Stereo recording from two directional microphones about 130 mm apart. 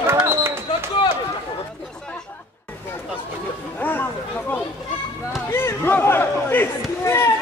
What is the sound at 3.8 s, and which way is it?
Chatter, 15° left (ahead or behind).